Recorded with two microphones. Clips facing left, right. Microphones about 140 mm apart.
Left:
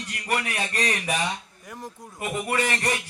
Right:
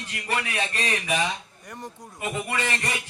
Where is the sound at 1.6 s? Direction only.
Centre (ahead or behind).